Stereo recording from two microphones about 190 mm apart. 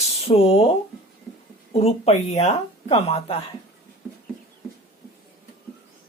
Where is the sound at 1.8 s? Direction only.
30° left (ahead or behind).